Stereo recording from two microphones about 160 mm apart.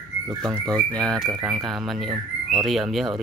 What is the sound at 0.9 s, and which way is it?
Speech, 5° left (ahead or behind).